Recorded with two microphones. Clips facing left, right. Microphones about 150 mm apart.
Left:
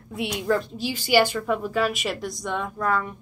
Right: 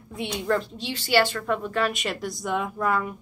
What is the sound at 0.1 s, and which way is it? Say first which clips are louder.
A woman's voice: left 1 dB; centre (ahead or behind).